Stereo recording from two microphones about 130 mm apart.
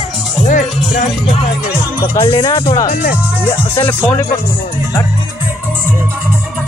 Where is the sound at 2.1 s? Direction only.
40° left (ahead or behind).